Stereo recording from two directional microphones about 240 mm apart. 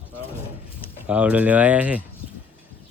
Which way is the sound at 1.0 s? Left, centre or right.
Centre.